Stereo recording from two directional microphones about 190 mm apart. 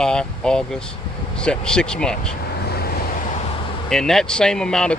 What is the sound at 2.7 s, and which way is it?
Vehicle, 55° left (ahead or behind).